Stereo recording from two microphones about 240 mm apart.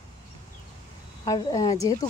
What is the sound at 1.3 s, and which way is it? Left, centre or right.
Speech, centre.